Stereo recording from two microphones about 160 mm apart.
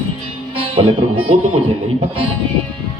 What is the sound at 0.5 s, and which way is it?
Speech, 35° right (ahead or behind).